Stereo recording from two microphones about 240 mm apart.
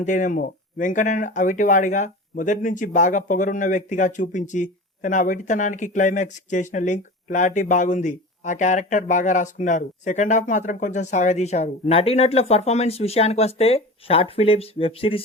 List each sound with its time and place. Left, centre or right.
0.0 s speech: left